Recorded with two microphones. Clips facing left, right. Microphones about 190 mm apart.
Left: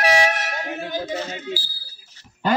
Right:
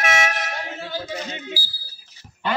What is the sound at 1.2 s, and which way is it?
Smoke detector, 10° right (ahead or behind).